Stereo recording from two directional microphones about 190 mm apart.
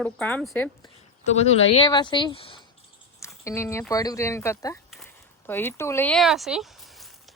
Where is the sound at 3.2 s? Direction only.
15° left (ahead or behind).